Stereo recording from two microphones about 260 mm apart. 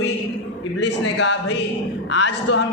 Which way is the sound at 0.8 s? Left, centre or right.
Left.